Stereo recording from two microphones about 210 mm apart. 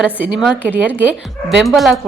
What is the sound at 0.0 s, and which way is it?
Speech, 5° right (ahead or behind).